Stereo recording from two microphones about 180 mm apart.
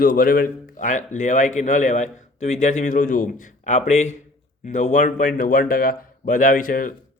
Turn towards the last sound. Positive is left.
turn(degrees=50)  # may be behind; listen again after turning